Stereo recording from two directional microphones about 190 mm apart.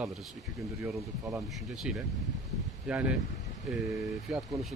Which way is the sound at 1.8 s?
5° right (ahead or behind).